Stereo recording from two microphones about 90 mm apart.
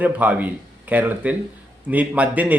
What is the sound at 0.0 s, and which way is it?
Speech, 15° right (ahead or behind).